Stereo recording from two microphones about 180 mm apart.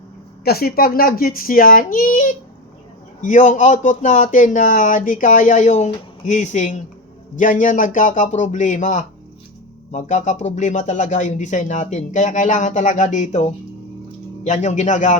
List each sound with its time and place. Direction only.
0.4 s speech: 60° left (ahead or behind); by 15.2 s 45° left (ahead or behind)